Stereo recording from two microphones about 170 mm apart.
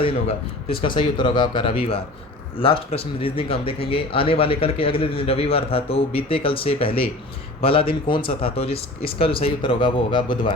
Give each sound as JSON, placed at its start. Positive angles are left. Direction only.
{"t": 0.0, "sound": "speech", "side_deg": 30}